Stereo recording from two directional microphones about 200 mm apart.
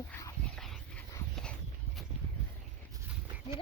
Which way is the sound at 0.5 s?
5° left (ahead or behind).